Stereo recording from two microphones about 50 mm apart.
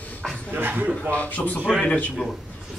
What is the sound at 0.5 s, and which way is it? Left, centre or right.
Speech, right.